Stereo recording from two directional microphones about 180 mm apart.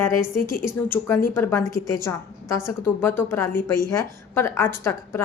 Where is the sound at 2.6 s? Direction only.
10° left (ahead or behind).